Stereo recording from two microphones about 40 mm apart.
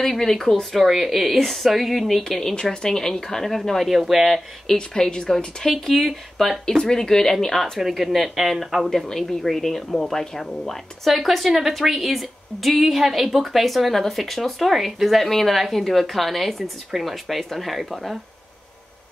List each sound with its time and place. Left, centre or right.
0.0 s speech: centre
0.7 s a woman's voice: centre
2.5 s speech: left
3.9 s a woman's voice: centre
4.7 s a woman's voice: centre
5.7 s a woman's voice: centre
7.8 s a woman's voice: centre
8.9 s speech: centre
11.1 s a woman's voice: centre